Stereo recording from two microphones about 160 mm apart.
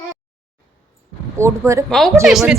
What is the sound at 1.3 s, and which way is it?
Speech, 15° right (ahead or behind).